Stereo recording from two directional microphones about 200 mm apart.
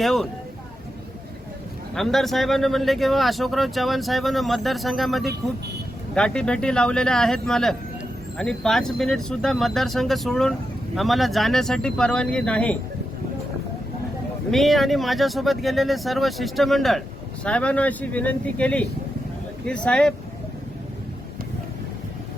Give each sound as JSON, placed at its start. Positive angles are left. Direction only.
{"t": 0.0, "sound": "speech", "side_deg": 0}
{"t": 2.0, "sound": "speech", "side_deg": 0}
{"t": 5.2, "sound": "speech", "side_deg": -55}
{"t": 6.1, "sound": "speech", "side_deg": 5}
{"t": 14.5, "sound": "speech", "side_deg": 0}